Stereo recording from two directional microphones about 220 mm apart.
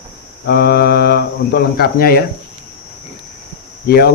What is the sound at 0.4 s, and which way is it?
Speech, 45° left (ahead or behind).